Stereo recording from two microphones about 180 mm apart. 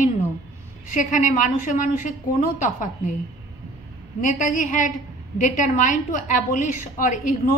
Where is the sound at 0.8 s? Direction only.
45° left (ahead or behind).